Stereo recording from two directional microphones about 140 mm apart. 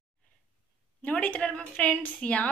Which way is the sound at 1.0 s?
10° left (ahead or behind).